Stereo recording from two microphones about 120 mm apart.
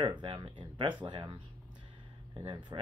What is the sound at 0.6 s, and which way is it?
Speech, 40° right (ahead or behind).